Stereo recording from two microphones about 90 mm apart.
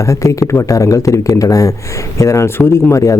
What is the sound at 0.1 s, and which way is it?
Speech, 35° left (ahead or behind).